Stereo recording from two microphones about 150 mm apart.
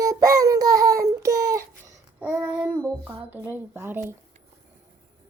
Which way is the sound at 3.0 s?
10° right (ahead or behind).